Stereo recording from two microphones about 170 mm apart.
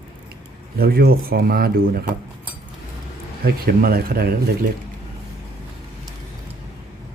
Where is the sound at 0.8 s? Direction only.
60° right (ahead or behind).